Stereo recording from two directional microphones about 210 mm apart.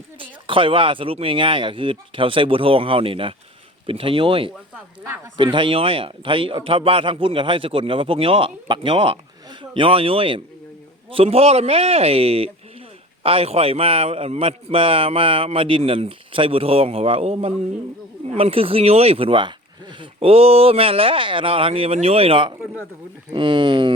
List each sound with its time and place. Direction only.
0.2 s a man's voice: 25° right (ahead or behind)
4.7 s speech: 10° right (ahead or behind)
5.4 s a man's voice: 25° right (ahead or behind)